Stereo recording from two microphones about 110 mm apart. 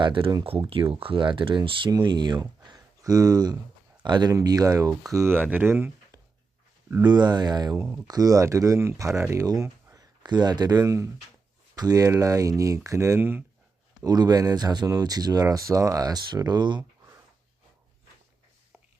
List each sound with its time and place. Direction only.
0.0 s speech: 50° right (ahead or behind); by 5.9 s 20° right (ahead or behind)
7.0 s speech: 40° right (ahead or behind)
10.2 s speech: 40° right (ahead or behind); by 13.4 s 20° right (ahead or behind)
14.0 s speech: 35° right (ahead or behind)